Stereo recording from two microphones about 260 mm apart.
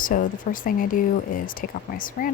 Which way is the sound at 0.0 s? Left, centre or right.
Left.